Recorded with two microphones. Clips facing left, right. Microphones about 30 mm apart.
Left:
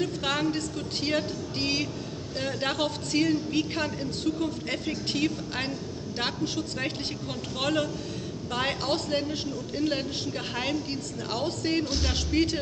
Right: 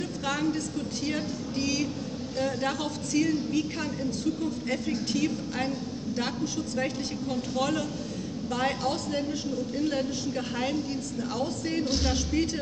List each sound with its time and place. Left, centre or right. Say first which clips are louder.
0.0 s a sound: left 2 dB; left
1.0 s a woman's voice: left 5 dB; left
9.8 s speech: left 1 dB; left
10.9 s a woman's voice: right 1 dB; left